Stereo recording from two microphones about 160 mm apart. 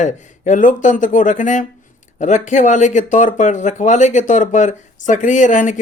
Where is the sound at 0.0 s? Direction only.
50° left (ahead or behind).